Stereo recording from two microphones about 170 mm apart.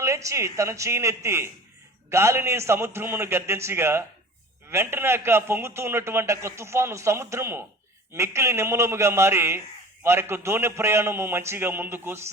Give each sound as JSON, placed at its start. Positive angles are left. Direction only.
{"t": 0.0, "sound": "a man's voice", "side_deg": -20}